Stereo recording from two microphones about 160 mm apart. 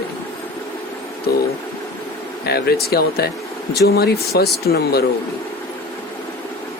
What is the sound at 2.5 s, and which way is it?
Speech, 80° left.